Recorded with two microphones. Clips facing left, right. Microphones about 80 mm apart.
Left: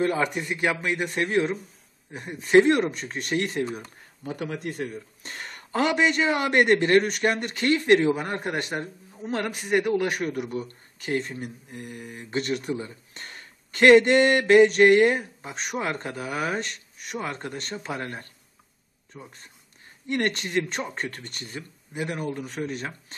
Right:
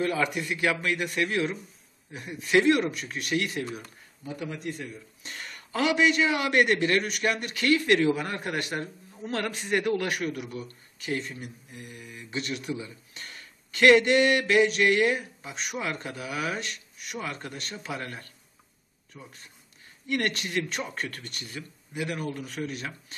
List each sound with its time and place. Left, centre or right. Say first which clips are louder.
0.0 s speech: left 3 dB; left
4.2 s speech: left 4 dB; left
10.3 s speech: left 6 dB; left
19.1 s speech: left 3 dB; centre
20.1 s speech: left 2 dB; left